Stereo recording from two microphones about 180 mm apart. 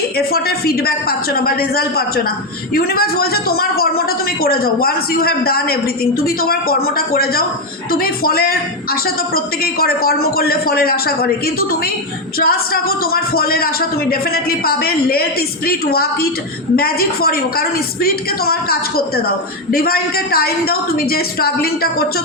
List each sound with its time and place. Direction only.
0.2 s a man's voice: 60° left (ahead or behind)